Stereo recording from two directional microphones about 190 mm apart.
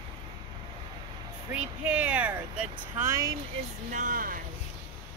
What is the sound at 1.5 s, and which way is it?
Speech, 5° right (ahead or behind).